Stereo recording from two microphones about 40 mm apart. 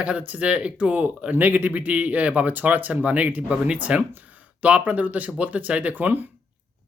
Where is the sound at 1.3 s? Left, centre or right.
Right.